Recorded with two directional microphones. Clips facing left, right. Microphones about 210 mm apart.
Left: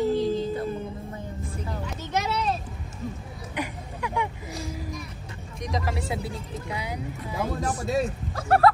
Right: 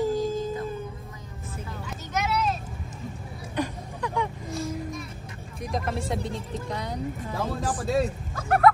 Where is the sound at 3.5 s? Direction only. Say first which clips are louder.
Right 3 dB; 15° left (ahead or behind).